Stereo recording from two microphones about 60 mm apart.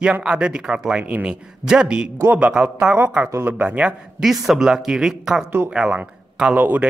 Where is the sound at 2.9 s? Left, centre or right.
Centre.